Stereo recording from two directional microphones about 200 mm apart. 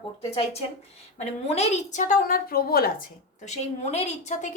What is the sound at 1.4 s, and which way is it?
A woman's voice, 35° left (ahead or behind).